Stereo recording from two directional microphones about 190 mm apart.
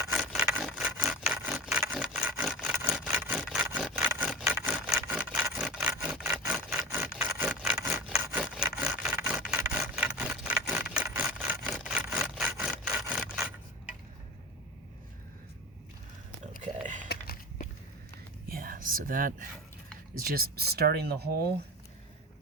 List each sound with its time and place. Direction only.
0.1 s wood: 5° right (ahead or behind)
5.7 s sawing: 5° right (ahead or behind)
6.5 s wood: 10° right (ahead or behind)
7.8 s wood: 10° right (ahead or behind)
16.6 s a sound: 40° right (ahead or behind)
17.1 s a sound: 50° left (ahead or behind)
18.4 s whispering: 50° right (ahead or behind)
20.1 s speech: 50° right (ahead or behind)